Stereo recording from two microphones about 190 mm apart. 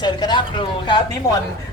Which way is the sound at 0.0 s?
20° left (ahead or behind).